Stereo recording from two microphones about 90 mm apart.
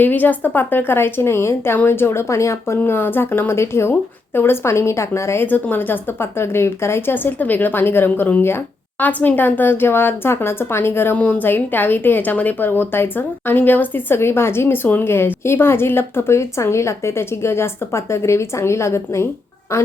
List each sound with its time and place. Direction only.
0.0 s a woman's voice: 20° left (ahead or behind)